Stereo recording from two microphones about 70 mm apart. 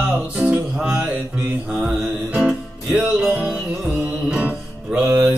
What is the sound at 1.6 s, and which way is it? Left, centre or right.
Mantra, centre.